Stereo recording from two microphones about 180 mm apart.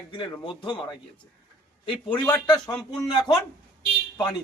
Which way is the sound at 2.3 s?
20° left (ahead or behind).